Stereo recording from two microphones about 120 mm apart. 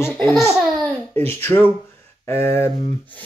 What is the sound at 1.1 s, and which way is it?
Speech, 15° left (ahead or behind).